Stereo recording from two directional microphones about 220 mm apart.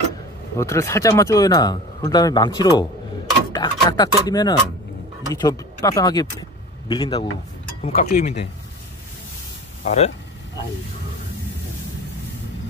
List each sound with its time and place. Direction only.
0.6 s a man's voice: 15° left (ahead or behind)
7.9 s speech: 35° left (ahead or behind)
9.8 s a man's voice: 30° left (ahead or behind)